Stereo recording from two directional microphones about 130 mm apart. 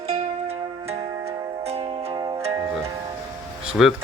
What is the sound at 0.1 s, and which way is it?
Music, 55° right (ahead or behind).